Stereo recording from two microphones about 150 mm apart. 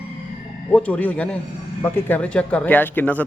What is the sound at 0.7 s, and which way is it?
Speech, 10° left (ahead or behind).